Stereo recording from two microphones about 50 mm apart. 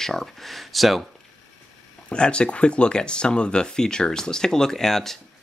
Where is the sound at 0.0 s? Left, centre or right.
Centre.